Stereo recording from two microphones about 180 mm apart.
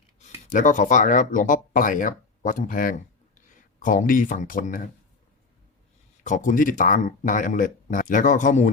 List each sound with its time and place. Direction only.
0.2 s speech: 35° left (ahead or behind)
6.2 s speech: 45° left (ahead or behind)